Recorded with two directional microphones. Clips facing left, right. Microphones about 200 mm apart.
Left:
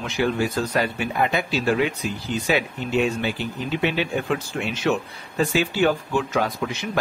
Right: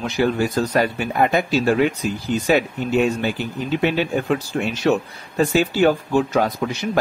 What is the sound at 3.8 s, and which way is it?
Speech, 40° right (ahead or behind).